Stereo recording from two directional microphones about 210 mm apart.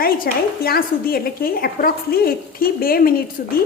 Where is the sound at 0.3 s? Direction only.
45° left (ahead or behind).